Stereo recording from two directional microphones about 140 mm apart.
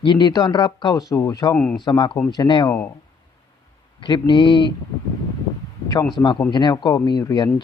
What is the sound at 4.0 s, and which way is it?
Speech, 35° left (ahead or behind).